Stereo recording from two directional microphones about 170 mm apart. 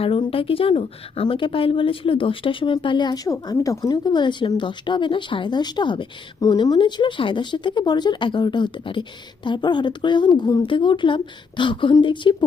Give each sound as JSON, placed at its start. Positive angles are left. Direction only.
{"t": 0.0, "sound": "a woman's voice", "side_deg": 35}